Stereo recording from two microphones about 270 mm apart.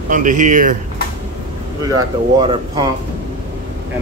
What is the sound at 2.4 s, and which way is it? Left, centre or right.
Speech, centre.